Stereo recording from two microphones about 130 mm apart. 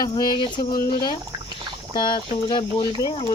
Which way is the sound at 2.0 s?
35° left (ahead or behind).